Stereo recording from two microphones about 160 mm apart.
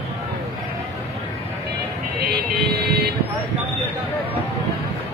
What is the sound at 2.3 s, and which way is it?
Vehicle, 85° right.